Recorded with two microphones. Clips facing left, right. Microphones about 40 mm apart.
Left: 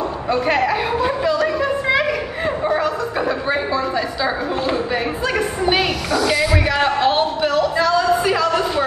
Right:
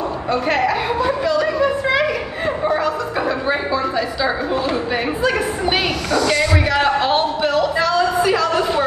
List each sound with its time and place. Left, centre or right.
0.7 s a woman's voice: centre
1.6 s chuckle: centre
5.7 s speech: centre